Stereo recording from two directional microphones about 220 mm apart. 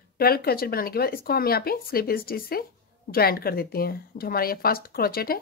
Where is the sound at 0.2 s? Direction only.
45° left (ahead or behind).